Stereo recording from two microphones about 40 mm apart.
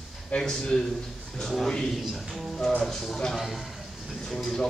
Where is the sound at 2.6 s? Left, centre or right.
Centre.